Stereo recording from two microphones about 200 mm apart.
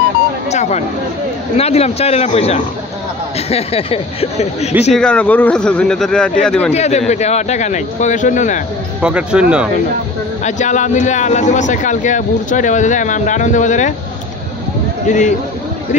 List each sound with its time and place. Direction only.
0.5 s speech: 35° left (ahead or behind)
4.9 s speech: 5° left (ahead or behind)
6.7 s speech: 35° left (ahead or behind)
9.0 s speech: 5° right (ahead or behind)
10.4 s speech: 35° left (ahead or behind)
15.0 s speech: 40° left (ahead or behind)